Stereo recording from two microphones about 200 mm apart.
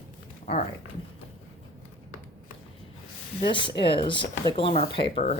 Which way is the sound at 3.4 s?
25° left (ahead or behind).